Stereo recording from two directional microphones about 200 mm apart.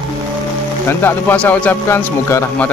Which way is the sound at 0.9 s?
10° left (ahead or behind).